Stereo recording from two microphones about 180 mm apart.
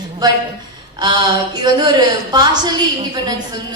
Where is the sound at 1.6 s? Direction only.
25° right (ahead or behind).